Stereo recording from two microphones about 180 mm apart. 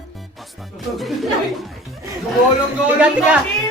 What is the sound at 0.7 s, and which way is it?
Music, centre (ahead or behind).